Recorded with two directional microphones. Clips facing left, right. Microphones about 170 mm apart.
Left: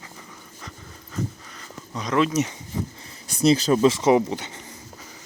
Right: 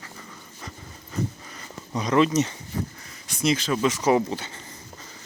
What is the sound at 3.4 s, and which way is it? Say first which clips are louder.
Speech: left 6 dB; 35° left (ahead or behind).